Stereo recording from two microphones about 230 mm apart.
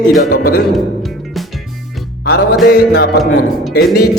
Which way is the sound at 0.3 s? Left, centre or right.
Left.